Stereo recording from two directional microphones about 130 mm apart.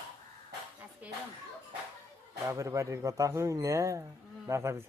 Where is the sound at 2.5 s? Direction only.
25° right (ahead or behind).